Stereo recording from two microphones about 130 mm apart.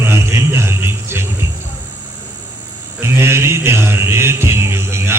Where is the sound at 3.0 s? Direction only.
20° right (ahead or behind).